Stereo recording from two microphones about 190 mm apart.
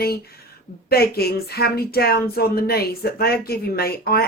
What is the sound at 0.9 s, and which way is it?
Speech, 55° left (ahead or behind).